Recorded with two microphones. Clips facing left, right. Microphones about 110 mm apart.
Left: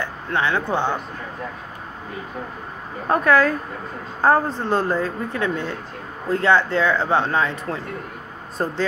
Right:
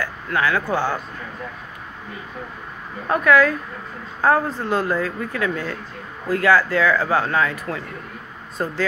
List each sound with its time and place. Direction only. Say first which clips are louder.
0.0 s speech: right 1 dB; 25° left (ahead or behind)
3.1 s speech: right 1 dB; 35° left (ahead or behind)